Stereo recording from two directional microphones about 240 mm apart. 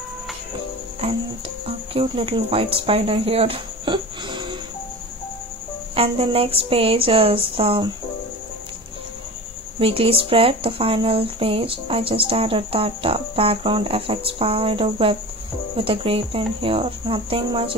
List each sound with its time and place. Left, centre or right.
1.0 s music: right
2.0 s speech: right
5.9 s speech: right
9.8 s speech: right